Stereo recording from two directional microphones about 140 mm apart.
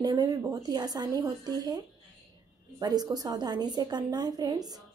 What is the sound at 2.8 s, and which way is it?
A woman's voice, 30° right (ahead or behind).